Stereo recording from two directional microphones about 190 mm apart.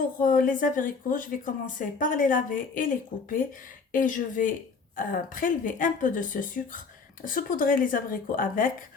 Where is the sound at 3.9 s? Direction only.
45° left (ahead or behind).